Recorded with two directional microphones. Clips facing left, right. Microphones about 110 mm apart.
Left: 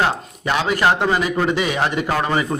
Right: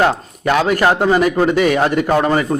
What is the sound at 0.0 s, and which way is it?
A man's voice, 50° right (ahead or behind).